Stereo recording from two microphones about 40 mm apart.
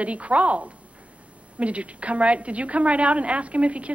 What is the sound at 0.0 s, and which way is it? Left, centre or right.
A woman's voice, right.